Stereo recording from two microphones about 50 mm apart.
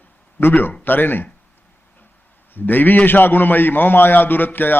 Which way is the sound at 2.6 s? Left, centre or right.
Left.